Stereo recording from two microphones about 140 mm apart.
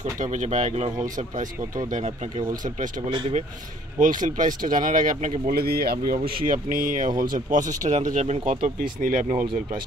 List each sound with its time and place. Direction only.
0.2 s speech: 60° right (ahead or behind)
3.1 s speech: 35° right (ahead or behind)
4.0 s speech: 70° right (ahead or behind)